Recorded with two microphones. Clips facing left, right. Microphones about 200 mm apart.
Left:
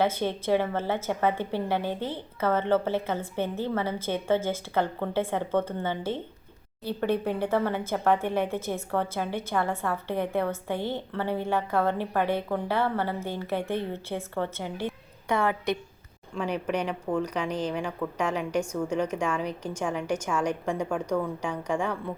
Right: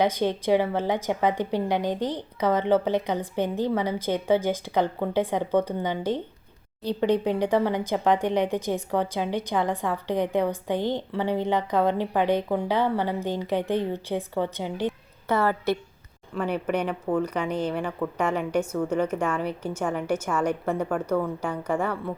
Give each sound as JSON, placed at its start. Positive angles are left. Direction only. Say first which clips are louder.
{"t": 0.0, "sound": "speech", "louder": "right 3 dB", "side_deg": -15}
{"t": 15.3, "sound": "a woman's voice", "louder": "right 3 dB", "side_deg": -5}